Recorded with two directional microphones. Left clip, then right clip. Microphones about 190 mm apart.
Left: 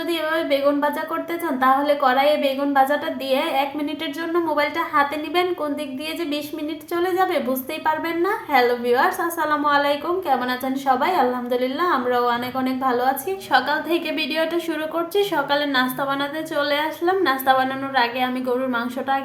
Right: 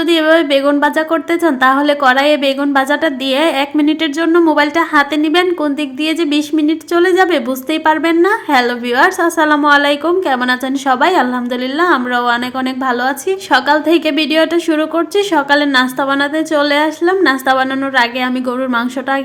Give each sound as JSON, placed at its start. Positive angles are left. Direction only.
{"t": 0.1, "sound": "a woman's voice", "side_deg": -50}